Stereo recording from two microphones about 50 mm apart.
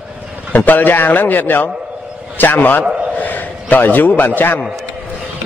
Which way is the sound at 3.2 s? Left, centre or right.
Left.